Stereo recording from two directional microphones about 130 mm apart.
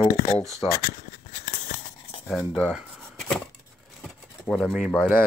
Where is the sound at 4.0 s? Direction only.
5° left (ahead or behind).